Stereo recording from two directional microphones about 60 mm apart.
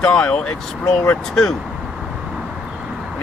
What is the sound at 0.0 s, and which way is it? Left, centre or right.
Speech, centre.